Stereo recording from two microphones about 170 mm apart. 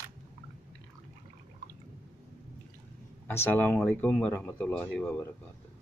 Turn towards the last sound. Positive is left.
turn(degrees=5)  # may be behind; listen again after turning